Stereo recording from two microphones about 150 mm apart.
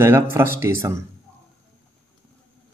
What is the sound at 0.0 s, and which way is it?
Speech, 15° right (ahead or behind).